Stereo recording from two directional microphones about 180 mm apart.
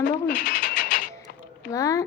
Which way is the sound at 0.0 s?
65° left (ahead or behind).